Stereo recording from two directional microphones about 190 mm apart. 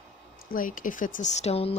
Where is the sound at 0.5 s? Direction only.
45° left (ahead or behind).